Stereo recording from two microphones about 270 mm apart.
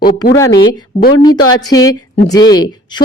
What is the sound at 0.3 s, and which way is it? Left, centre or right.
A woman's voice, centre.